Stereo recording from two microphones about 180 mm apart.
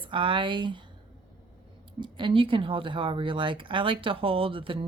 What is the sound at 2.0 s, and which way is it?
Speech, 25° right (ahead or behind).